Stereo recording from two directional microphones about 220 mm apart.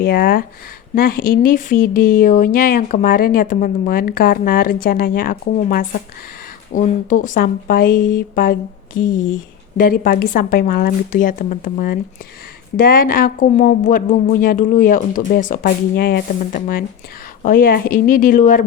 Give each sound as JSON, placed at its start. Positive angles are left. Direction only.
{"t": 0.0, "sound": "speech", "side_deg": 45}
{"t": 9.8, "sound": "speech", "side_deg": 40}